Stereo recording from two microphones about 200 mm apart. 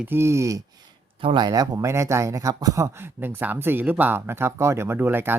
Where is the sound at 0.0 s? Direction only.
10° right (ahead or behind).